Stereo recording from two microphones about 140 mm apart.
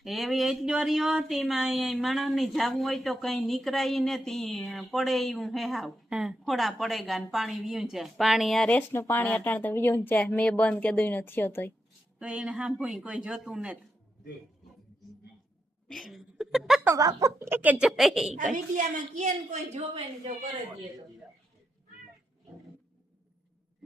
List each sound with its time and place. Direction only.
0.0 s speech: centre (ahead or behind); by 11.7 s 15° left (ahead or behind)
12.2 s speech: 10° right (ahead or behind)
15.9 s speech: centre (ahead or behind)
16.8 s speech: 25° right (ahead or behind); by 18.3 s centre (ahead or behind)
18.5 s a woman's voice: 60° right (ahead or behind)